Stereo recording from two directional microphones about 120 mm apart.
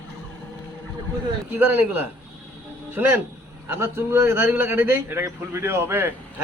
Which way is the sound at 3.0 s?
15° right (ahead or behind).